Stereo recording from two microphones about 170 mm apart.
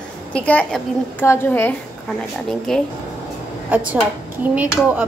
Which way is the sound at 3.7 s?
10° right (ahead or behind).